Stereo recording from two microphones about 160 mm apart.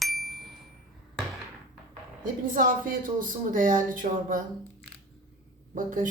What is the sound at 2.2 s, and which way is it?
A woman's voice, 60° right (ahead or behind).